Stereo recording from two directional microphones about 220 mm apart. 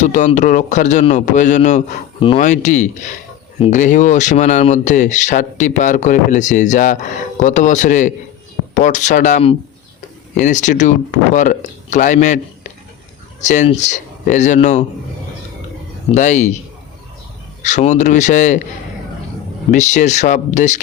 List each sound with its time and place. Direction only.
0.0 s speech: 35° left (ahead or behind)
13.4 s speech: 35° left (ahead or behind)
16.0 s speech: 35° left (ahead or behind)
17.6 s speech: 30° left (ahead or behind)
19.7 s speech: 35° left (ahead or behind)